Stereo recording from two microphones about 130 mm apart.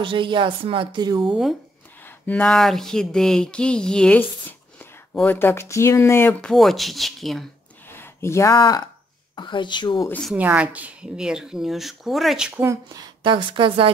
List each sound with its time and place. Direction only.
0.0 s speech: 40° right (ahead or behind)
1.3 s speech: centre (ahead or behind)
2.0 s a sound: 10° left (ahead or behind)
2.4 s speech: centre (ahead or behind); by 6.4 s 20° left (ahead or behind)
6.4 s speech: centre (ahead or behind)
7.9 s a sound: 20° left (ahead or behind)
8.5 s speech: 30° left (ahead or behind)
10.3 s speech: 10° right (ahead or behind)
12.9 s a woman's voice: 35° right (ahead or behind)